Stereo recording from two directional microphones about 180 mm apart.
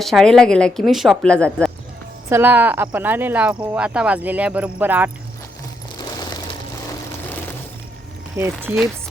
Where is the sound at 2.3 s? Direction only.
10° right (ahead or behind).